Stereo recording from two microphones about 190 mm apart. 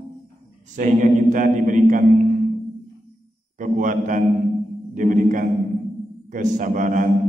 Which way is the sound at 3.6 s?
45° right (ahead or behind).